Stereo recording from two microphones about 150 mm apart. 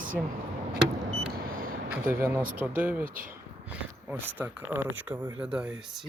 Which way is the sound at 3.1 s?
65° right (ahead or behind).